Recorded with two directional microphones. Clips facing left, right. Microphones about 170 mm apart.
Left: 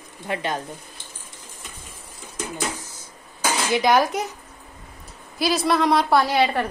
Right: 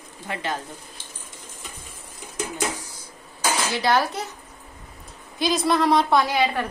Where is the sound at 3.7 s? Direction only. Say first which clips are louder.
Left 5 dB; 15° left (ahead or behind).